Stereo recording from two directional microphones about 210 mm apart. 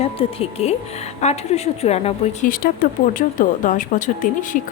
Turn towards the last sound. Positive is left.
turn(degrees=40)  # may be behind; listen again after turning